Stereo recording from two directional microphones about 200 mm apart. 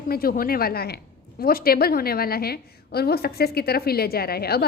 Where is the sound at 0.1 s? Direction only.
50° left (ahead or behind).